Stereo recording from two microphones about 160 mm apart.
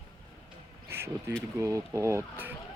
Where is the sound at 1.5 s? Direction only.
20° right (ahead or behind).